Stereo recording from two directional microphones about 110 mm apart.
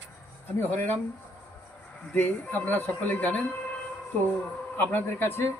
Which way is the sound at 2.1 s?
15° left (ahead or behind).